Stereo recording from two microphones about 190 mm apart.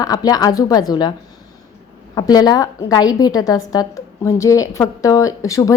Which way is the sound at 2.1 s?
20° left (ahead or behind).